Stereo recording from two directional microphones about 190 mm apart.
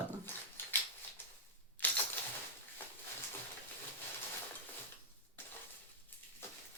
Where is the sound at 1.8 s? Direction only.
10° left (ahead or behind).